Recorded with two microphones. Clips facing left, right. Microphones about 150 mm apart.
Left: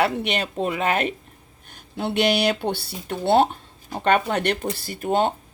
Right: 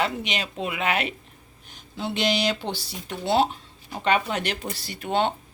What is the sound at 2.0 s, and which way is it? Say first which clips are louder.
Speech: left 4 dB; 60° left (ahead or behind).